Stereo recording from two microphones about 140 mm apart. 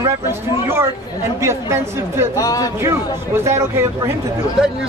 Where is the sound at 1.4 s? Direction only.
20° right (ahead or behind).